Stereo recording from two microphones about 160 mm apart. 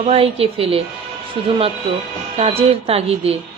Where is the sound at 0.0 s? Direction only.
35° right (ahead or behind).